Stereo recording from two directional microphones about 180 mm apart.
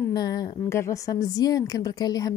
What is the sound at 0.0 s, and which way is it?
A woman's voice, 20° left (ahead or behind).